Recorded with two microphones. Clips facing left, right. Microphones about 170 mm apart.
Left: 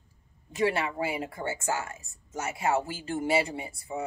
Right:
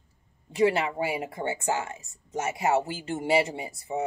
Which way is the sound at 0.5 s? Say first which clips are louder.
Right 4 dB; 20° right (ahead or behind).